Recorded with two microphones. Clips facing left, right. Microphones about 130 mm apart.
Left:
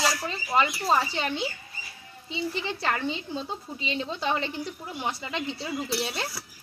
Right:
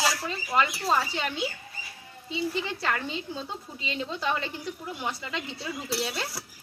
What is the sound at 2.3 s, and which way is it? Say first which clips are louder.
Speech: right 1 dB; 20° left (ahead or behind).